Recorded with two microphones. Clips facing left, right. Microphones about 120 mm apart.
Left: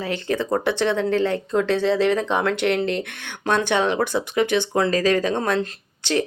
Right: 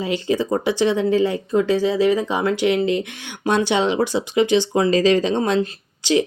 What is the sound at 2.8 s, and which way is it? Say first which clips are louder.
Speech: right 4 dB; 60° left (ahead or behind).